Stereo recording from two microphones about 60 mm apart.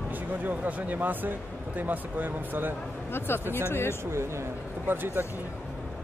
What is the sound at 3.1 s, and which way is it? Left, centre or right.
Speech, left.